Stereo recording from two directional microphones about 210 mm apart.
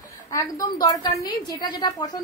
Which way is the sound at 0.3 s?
15° left (ahead or behind).